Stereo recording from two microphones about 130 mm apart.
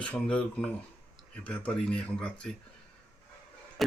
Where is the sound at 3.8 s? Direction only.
Centre (ahead or behind).